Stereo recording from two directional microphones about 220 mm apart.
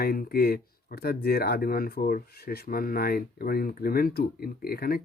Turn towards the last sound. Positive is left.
turn(degrees=45)  # may be behind; listen again after turning